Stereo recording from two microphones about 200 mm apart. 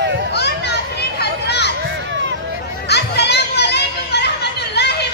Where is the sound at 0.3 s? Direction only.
55° left (ahead or behind).